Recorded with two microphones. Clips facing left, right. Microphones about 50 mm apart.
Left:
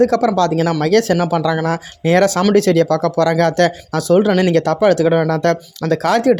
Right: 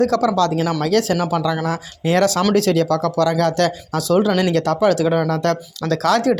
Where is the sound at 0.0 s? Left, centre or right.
Left.